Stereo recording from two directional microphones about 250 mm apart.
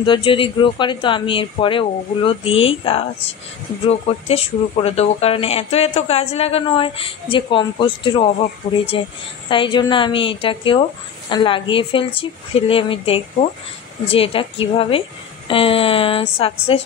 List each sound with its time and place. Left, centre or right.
0.0 s speech: centre